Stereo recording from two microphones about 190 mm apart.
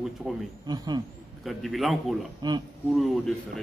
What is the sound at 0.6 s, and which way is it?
Speech, 20° right (ahead or behind).